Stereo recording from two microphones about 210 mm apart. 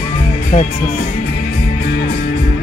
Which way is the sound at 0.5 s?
30° left (ahead or behind).